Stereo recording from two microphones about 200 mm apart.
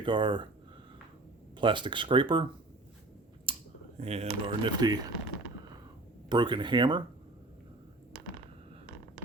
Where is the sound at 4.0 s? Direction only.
30° right (ahead or behind).